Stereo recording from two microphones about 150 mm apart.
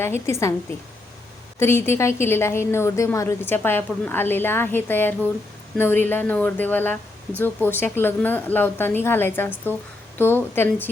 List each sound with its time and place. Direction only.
0.0 s a woman's voice: 20° left (ahead or behind)
1.5 s a woman's voice: 15° left (ahead or behind)